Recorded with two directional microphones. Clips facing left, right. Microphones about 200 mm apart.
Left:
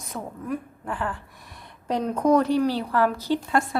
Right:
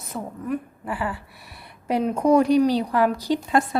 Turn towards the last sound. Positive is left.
turn(degrees=-20)  # may be behind; listen again after turning